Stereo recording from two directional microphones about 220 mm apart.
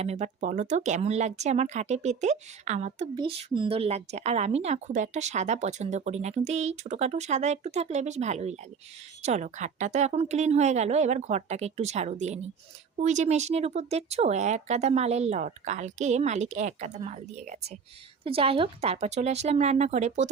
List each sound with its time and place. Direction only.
0.0 s speech: 30° right (ahead or behind)